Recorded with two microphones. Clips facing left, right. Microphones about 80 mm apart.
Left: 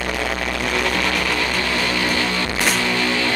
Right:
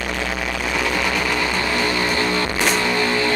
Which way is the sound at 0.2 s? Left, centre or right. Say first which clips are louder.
Left 1 dB; centre.